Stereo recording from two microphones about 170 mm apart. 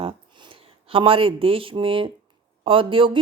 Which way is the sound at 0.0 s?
30° right (ahead or behind).